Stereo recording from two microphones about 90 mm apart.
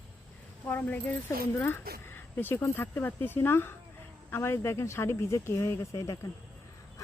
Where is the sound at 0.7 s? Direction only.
20° left (ahead or behind).